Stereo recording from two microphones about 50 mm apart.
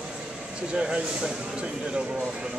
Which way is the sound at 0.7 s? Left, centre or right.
Right.